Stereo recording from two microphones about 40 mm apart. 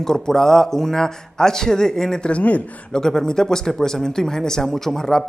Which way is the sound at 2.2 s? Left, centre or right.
Left.